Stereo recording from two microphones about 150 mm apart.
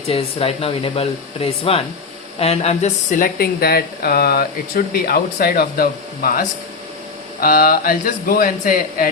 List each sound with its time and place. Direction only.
0.1 s speech: 40° left (ahead or behind); by 6.4 s 75° left (ahead or behind)
7.4 s speech: 75° left (ahead or behind)